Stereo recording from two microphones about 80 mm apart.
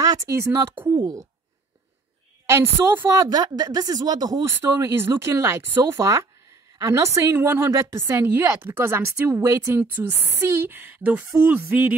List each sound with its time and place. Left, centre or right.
0.0 s a sound: right
0.3 s speech: right
2.5 s speech: right
3.1 s a woman's voice: right
4.5 s speech: right
7.3 s speech: right
9.8 s a woman's voice: right